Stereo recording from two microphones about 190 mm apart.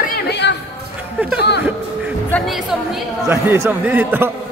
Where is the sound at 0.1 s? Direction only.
60° left (ahead or behind).